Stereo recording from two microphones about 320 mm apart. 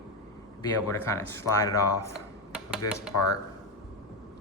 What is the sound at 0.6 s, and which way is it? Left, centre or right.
Speech, centre.